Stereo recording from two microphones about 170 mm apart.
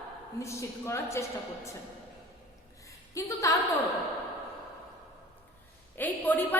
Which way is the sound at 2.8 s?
20° left (ahead or behind).